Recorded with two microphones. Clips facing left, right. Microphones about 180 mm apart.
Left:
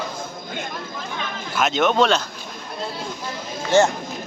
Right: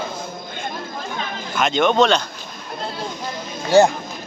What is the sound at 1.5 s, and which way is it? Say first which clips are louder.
Speech: right 2 dB; 5° left (ahead or behind).